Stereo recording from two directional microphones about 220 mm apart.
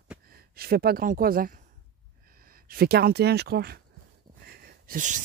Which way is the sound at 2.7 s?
45° right (ahead or behind).